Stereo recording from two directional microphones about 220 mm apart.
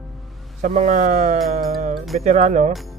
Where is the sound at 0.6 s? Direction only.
35° right (ahead or behind).